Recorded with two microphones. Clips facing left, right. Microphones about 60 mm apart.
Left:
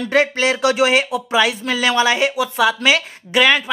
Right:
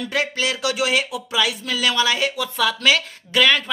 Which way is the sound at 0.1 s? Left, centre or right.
Left.